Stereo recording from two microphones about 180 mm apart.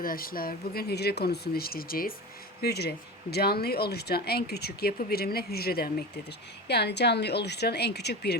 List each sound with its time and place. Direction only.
0.0 s a woman's voice: 55° left (ahead or behind)